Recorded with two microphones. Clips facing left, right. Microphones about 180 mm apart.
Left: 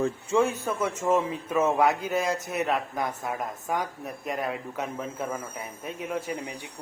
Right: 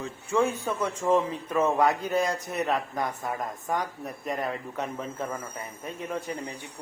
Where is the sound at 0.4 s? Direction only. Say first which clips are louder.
Even; 5° left (ahead or behind).